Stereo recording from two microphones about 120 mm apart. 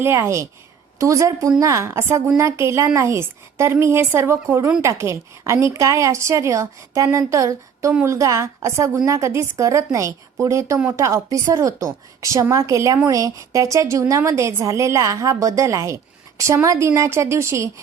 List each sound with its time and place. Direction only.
0.0 s a woman's voice: 20° right (ahead or behind)